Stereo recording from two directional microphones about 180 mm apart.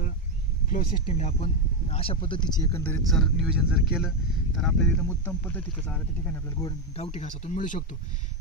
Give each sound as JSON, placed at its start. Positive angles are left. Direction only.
{"t": 0.7, "sound": "speech", "side_deg": 50}
{"t": 1.0, "sound": "speech", "side_deg": 35}
{"t": 7.0, "sound": "speech", "side_deg": 35}